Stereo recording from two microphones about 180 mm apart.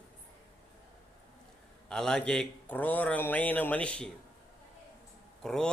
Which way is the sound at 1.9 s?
5° left (ahead or behind).